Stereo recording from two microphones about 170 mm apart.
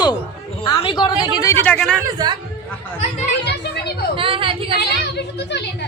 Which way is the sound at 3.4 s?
80° left.